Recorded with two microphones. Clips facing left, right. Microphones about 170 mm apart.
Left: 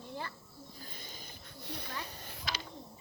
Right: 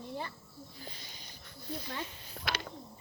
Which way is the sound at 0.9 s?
50° left (ahead or behind).